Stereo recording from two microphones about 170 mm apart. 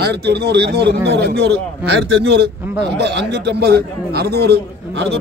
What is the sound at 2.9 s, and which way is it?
A man's voice, 90° right.